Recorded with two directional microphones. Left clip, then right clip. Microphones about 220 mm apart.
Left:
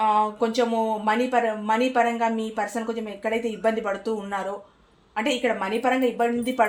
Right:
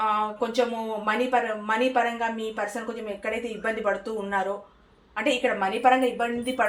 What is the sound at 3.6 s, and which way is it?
Speech, 50° left (ahead or behind).